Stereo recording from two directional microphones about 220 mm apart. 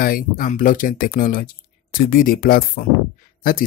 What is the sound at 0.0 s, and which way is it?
Speech, 40° left (ahead or behind).